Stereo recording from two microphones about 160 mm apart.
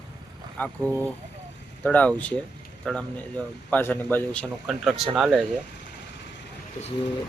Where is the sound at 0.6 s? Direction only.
10° left (ahead or behind).